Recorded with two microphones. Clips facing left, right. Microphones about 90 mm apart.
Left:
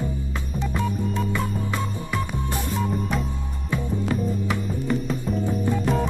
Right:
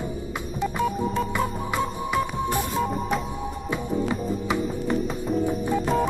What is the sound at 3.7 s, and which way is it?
Music, 10° right (ahead or behind).